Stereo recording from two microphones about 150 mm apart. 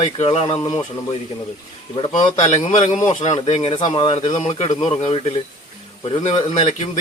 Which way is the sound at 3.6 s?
35° left (ahead or behind).